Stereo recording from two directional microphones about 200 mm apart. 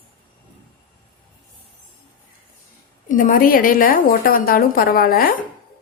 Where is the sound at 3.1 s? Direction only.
40° left (ahead or behind).